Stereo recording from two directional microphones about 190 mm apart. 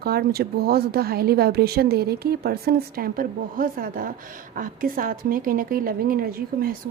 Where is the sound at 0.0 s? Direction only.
55° right (ahead or behind).